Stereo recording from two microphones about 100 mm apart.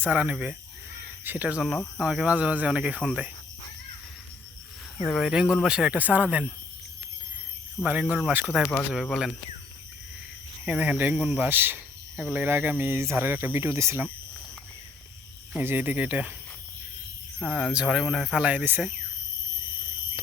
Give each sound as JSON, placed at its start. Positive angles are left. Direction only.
{"t": 0.0, "sound": "speech", "side_deg": -15}
{"t": 5.0, "sound": "speech", "side_deg": -5}
{"t": 7.9, "sound": "speech", "side_deg": -15}
{"t": 8.9, "sound": "speech", "side_deg": -5}
{"t": 10.7, "sound": "speech", "side_deg": -10}
{"t": 15.5, "sound": "speech", "side_deg": -20}
{"t": 17.4, "sound": "speech", "side_deg": 0}